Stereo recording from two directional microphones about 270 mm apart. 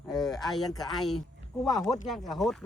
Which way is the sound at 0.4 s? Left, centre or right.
Centre.